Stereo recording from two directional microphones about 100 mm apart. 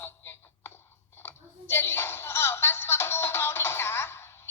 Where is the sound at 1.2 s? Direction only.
25° left (ahead or behind).